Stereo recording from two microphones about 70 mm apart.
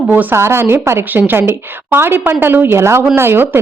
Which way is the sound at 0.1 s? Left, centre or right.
Right.